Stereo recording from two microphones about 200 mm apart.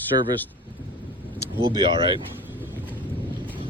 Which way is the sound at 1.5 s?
25° right (ahead or behind).